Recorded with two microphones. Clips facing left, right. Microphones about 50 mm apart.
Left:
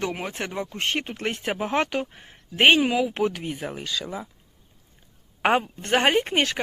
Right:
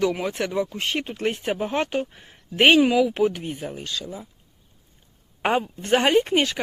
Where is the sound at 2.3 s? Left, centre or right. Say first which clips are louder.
Right 1 dB; left.